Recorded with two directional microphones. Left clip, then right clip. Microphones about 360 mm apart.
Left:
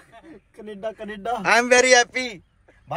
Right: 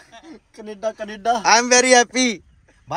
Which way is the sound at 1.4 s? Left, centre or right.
Centre.